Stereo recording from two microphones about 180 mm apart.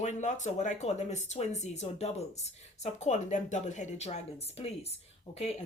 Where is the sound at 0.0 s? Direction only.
40° left (ahead or behind).